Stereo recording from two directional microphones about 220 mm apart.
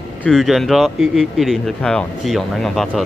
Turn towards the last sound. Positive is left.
turn(degrees=0)  # may be behind; listen again after turning